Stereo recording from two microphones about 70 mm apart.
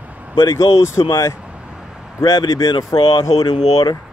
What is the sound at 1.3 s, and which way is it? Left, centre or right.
Vehicle, centre.